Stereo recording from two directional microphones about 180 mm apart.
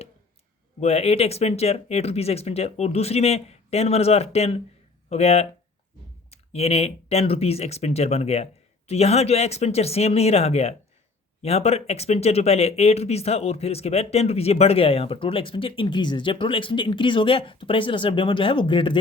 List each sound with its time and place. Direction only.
0.8 s speech: 35° left (ahead or behind)